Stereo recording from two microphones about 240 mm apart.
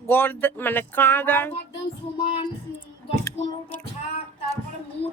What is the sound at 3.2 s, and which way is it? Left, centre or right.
Music, centre.